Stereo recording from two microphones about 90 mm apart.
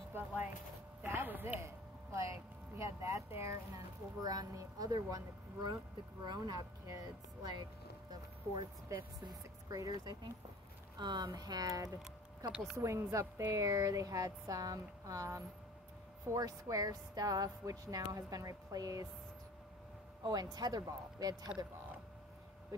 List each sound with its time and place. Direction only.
0.1 s speech: 25° right (ahead or behind)
2.8 s speech: 35° right (ahead or behind)
11.0 s speech: 55° right (ahead or behind)
12.7 s speech: 30° right (ahead or behind)
20.5 s speech: 45° right (ahead or behind)